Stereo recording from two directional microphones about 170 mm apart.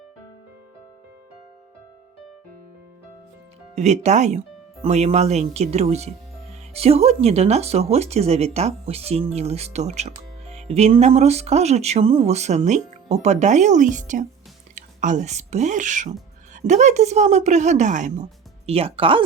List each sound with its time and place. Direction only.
3.8 s speech: 40° right (ahead or behind)